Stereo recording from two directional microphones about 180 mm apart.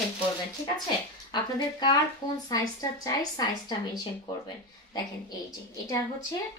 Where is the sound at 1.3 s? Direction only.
25° left (ahead or behind).